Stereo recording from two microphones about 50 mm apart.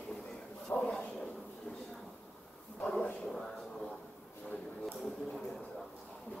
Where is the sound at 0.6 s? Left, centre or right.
Centre.